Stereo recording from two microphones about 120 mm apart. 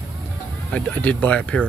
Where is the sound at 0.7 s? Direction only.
10° left (ahead or behind).